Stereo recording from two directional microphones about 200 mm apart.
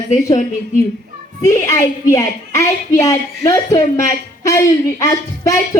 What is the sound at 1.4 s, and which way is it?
Speech, 15° left (ahead or behind).